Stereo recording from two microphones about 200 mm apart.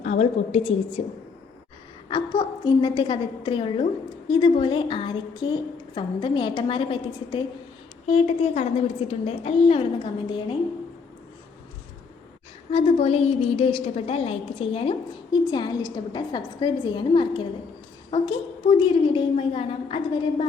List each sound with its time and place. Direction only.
0.0 s a woman's voice: 35° left (ahead or behind)
2.0 s a woman's voice: 25° left (ahead or behind)
12.7 s a woman's voice: 30° left (ahead or behind)